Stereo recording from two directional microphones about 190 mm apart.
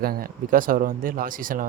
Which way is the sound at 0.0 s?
50° right (ahead or behind).